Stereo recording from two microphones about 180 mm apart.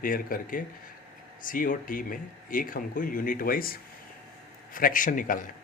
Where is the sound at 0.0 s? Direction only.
50° left (ahead or behind).